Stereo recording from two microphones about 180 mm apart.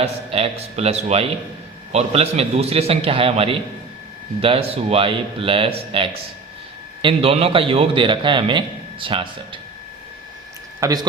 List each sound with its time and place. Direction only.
0.0 s a man's voice: 35° right (ahead or behind)
10.8 s speech: 20° right (ahead or behind)